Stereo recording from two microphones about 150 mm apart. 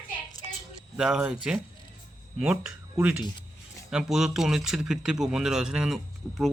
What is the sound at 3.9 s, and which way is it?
Speech, 5° right (ahead or behind).